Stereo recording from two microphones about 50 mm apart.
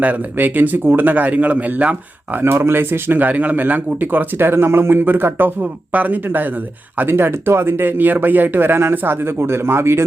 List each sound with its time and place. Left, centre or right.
0.0 s a man's voice: right
2.4 s a man's voice: right
7.1 s speech: right